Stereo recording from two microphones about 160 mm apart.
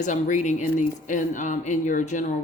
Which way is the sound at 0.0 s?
50° left (ahead or behind).